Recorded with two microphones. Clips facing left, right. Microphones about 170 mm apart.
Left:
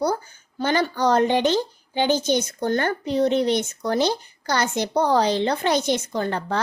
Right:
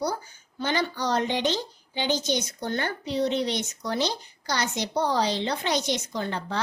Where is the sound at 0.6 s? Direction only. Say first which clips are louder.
Left 6 dB; 50° left (ahead or behind).